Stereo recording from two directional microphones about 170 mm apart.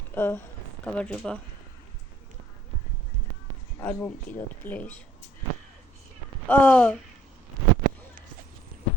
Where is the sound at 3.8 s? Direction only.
10° left (ahead or behind).